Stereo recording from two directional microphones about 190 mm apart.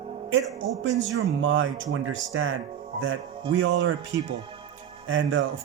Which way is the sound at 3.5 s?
70° right (ahead or behind).